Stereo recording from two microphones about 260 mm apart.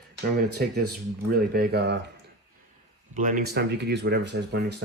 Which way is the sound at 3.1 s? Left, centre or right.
Right.